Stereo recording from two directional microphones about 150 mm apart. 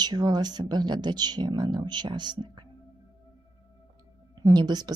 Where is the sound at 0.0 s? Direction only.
25° right (ahead or behind).